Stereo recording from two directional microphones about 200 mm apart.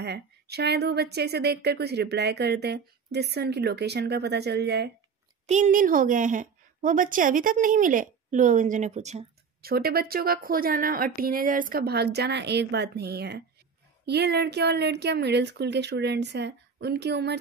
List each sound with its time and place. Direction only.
0.0 s speech: 55° right (ahead or behind)
5.5 s a woman's voice: 40° right (ahead or behind)
9.6 s speech: 50° right (ahead or behind)